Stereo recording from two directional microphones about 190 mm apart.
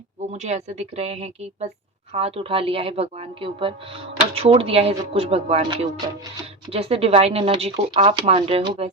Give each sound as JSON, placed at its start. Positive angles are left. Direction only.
{"t": 0.2, "sound": "a woman's voice", "side_deg": -35}